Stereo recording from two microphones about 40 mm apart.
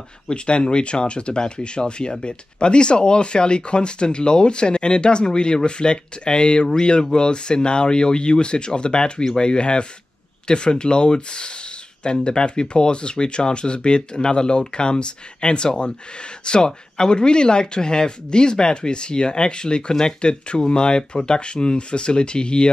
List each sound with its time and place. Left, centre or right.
0.3 s speech: left